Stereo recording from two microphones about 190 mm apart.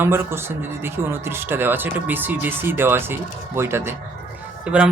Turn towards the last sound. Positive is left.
turn(degrees=-5)  # may be behind; listen again after turning